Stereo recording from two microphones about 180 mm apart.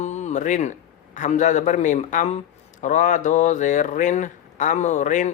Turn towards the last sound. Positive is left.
turn(degrees=45)  # may be behind; listen again after turning